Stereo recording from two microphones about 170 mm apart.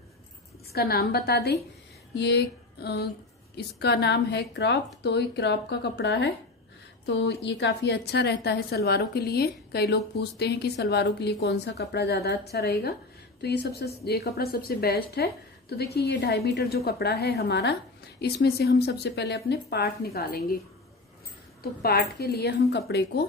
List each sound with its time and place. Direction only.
0.7 s a woman's voice: 65° left (ahead or behind)
2.1 s a sound: 85° left
3.5 s a woman's voice: 75° left (ahead or behind)
21.8 s a woman's voice: 65° left (ahead or behind)
22.7 s a woman's voice: 80° left